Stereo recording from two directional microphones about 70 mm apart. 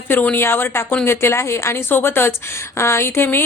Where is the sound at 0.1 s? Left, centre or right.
Left.